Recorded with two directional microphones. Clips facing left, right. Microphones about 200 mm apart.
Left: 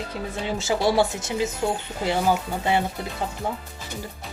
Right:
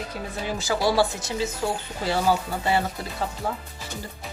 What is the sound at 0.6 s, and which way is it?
Speech, 25° left (ahead or behind).